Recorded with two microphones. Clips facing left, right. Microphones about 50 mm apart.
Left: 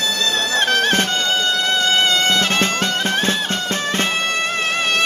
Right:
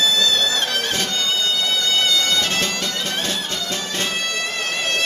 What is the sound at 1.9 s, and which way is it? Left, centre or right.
Music, left.